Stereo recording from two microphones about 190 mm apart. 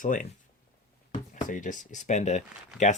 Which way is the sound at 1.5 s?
40° left (ahead or behind).